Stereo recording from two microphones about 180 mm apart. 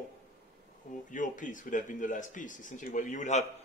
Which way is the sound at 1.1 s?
45° left (ahead or behind).